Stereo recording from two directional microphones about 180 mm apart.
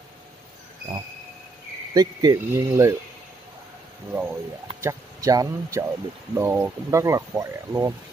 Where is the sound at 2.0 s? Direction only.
20° right (ahead or behind).